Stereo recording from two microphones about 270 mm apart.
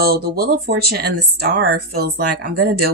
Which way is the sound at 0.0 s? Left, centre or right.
Right.